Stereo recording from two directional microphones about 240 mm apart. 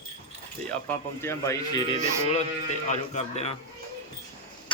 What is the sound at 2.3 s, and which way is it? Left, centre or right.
Speech, left.